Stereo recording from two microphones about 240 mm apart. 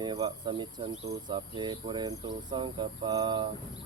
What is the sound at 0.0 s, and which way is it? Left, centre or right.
Cricket, centre.